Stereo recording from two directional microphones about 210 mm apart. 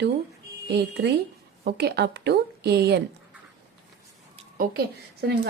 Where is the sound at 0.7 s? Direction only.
50° right (ahead or behind).